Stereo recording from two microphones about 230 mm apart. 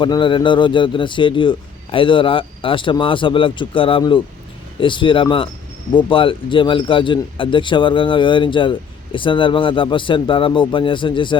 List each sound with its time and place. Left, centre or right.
0.0 s speech: left